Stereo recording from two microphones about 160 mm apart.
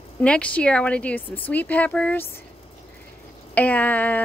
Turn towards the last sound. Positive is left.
turn(degrees=10)  # may be behind; listen again after turning